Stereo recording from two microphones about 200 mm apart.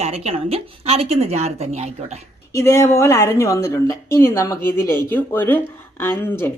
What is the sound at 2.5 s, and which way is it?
Speech, 15° left (ahead or behind).